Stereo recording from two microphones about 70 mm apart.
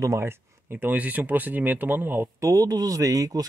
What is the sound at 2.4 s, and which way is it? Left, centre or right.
Speech, right.